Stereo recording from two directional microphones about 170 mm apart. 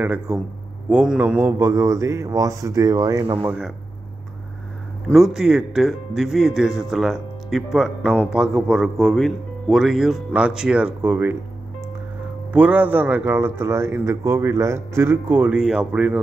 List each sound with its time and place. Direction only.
0.0 s a man's voice: 10° right (ahead or behind)
3.4 s speech: 5° right (ahead or behind)
5.0 s speech: centre (ahead or behind)
12.5 s a man's voice: 10° right (ahead or behind)